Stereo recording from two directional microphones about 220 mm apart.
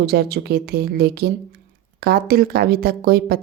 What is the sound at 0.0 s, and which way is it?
Speech, 45° right (ahead or behind).